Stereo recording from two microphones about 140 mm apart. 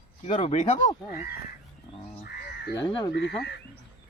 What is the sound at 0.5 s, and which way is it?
Speech, 60° left (ahead or behind).